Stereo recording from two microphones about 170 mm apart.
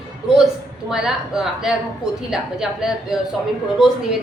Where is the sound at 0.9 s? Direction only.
5° right (ahead or behind).